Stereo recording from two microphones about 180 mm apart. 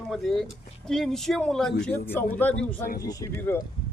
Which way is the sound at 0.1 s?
Centre (ahead or behind).